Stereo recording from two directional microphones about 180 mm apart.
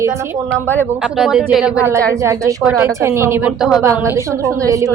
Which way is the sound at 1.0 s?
5° right (ahead or behind).